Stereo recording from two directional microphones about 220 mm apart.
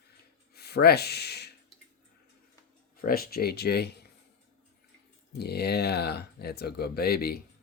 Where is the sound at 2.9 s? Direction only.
40° left (ahead or behind).